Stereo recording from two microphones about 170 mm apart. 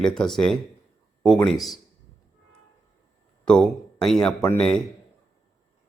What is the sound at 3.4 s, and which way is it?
Speech, 5° left (ahead or behind).